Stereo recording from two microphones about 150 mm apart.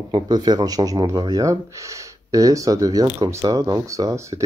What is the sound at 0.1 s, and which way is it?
Speech, 25° right (ahead or behind).